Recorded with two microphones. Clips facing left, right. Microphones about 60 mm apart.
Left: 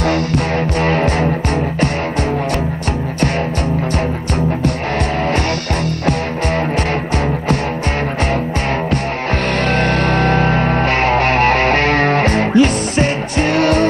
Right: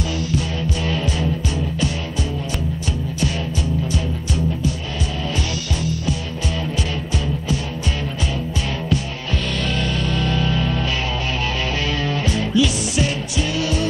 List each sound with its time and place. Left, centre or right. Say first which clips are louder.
0.0 s music: left 7 dB; left
9.7 s music: left 9 dB; left